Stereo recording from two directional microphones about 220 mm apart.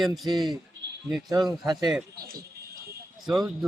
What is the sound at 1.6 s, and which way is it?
Speech, 20° right (ahead or behind).